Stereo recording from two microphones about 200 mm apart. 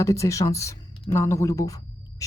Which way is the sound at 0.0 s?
15° left (ahead or behind).